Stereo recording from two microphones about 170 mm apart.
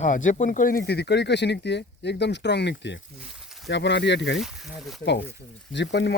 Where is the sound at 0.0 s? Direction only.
50° left (ahead or behind); by 3.0 s 90° left.